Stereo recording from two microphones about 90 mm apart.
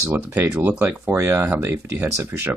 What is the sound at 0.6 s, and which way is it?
Speech, 20° right (ahead or behind).